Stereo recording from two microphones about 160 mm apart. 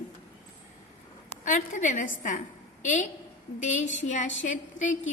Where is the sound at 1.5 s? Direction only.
55° left (ahead or behind).